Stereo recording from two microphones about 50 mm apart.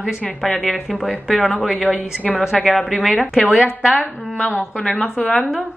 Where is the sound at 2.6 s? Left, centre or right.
Centre.